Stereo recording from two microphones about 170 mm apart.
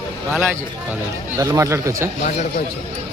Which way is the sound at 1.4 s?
20° right (ahead or behind).